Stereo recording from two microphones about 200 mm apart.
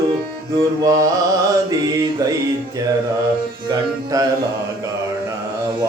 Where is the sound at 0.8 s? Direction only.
15° right (ahead or behind).